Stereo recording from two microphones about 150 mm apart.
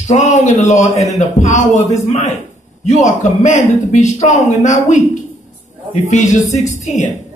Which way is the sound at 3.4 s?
55° left (ahead or behind).